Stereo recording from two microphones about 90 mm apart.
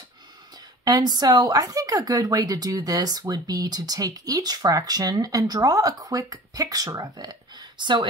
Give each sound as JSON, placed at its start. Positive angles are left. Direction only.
{"t": 0.8, "sound": "a woman's voice", "side_deg": -50}